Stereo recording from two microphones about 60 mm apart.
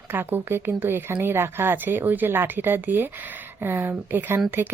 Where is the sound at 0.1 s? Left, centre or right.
Right.